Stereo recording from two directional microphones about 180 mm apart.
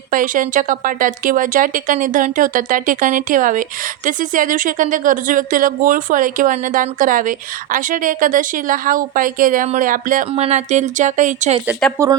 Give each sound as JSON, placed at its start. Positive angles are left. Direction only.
{"t": 0.1, "sound": "speech", "side_deg": -50}
{"t": 12.0, "sound": "speech", "side_deg": -15}